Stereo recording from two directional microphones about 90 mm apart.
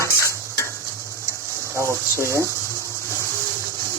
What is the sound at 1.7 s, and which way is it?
Speech, 30° right (ahead or behind).